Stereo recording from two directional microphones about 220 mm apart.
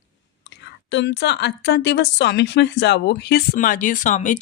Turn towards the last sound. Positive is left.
turn(degrees=35)  # may be behind; listen again after turning